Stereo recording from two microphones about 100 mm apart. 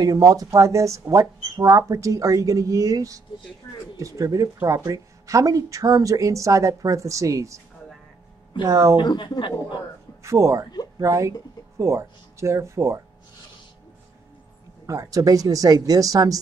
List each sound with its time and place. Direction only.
0.0 s speech: 40° right (ahead or behind)
8.6 s speech: 35° right (ahead or behind)
8.9 s a man's voice: 50° left (ahead or behind)
10.2 s speech: 30° right (ahead or behind)
14.9 s speech: 35° right (ahead or behind)